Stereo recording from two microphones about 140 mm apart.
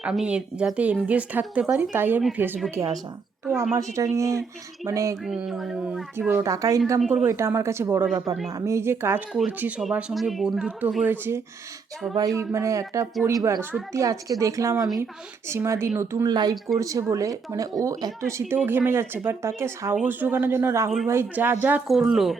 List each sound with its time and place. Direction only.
0.0 s speech: 5° right (ahead or behind)
2.6 s speech: 25° right (ahead or behind)
5.2 s speech: 5° right (ahead or behind)
12.1 s speech: 25° right (ahead or behind)
16.3 s speech: 30° right (ahead or behind); by 21.8 s 15° right (ahead or behind)
21.8 s speech: centre (ahead or behind)